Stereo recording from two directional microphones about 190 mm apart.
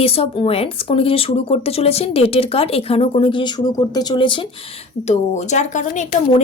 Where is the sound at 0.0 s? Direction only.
30° left (ahead or behind).